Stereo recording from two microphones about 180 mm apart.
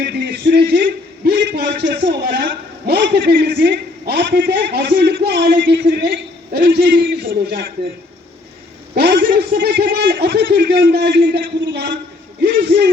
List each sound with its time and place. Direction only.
0.0 s a man's voice: 65° right (ahead or behind)
9.0 s a man's voice: 60° right (ahead or behind)